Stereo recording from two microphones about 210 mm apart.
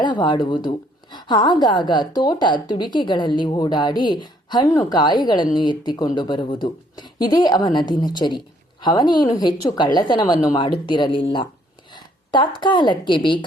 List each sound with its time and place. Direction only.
0.0 s a woman's voice: 20° left (ahead or behind)